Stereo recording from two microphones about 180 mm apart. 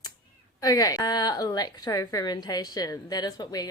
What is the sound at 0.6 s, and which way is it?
A woman's voice, 20° left (ahead or behind).